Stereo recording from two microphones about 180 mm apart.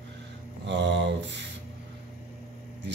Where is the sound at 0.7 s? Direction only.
80° right.